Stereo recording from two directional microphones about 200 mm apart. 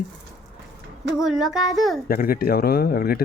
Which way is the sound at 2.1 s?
45° left (ahead or behind).